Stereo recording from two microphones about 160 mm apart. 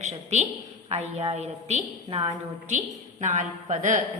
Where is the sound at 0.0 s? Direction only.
45° right (ahead or behind).